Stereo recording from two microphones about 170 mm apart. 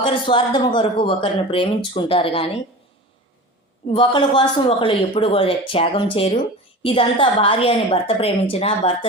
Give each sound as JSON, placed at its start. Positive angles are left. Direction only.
{"t": 0.0, "sound": "speech", "side_deg": 30}
{"t": 3.8, "sound": "speech", "side_deg": 30}